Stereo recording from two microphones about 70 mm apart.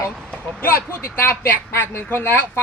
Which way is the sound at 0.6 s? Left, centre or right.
Left.